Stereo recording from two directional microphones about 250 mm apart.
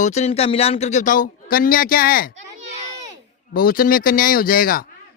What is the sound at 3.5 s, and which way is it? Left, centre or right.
A man's voice, left.